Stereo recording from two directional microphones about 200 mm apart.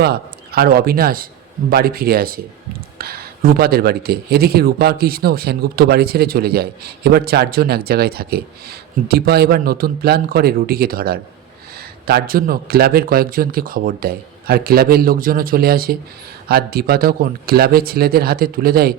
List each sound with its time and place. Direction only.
0.0 s speech: 50° right (ahead or behind)